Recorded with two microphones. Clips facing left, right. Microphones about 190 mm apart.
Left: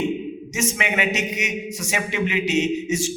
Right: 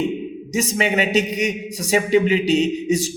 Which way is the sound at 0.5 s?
35° right (ahead or behind).